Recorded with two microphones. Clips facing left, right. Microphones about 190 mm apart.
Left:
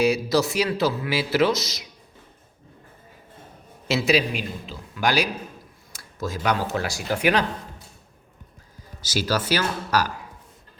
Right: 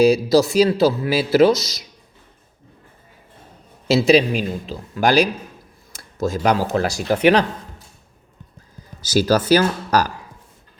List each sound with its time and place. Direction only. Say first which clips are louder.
0.0 s speech: right 7 dB; 35° right (ahead or behind)
3.8 s speech: right 7 dB; 30° right (ahead or behind)
6.1 s speech: right 6 dB; 45° right (ahead or behind)
9.1 s speech: right 9 dB; 40° right (ahead or behind)